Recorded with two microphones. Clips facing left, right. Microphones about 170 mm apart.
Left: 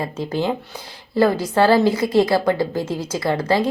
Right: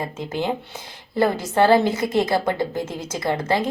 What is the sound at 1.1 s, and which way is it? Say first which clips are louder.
Speech: left 3 dB; 25° right (ahead or behind).